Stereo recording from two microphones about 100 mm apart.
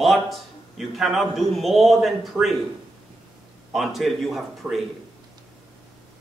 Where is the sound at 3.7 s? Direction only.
Centre (ahead or behind).